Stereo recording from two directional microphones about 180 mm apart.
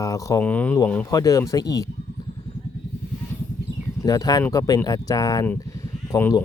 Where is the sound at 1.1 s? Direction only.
20° left (ahead or behind).